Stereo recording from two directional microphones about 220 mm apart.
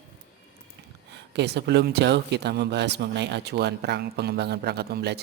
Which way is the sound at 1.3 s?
50° right (ahead or behind).